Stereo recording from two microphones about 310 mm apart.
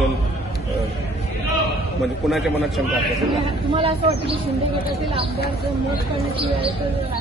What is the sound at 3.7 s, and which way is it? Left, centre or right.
Speech, centre.